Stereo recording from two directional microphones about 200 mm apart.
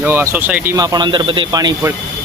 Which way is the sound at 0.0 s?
10° right (ahead or behind).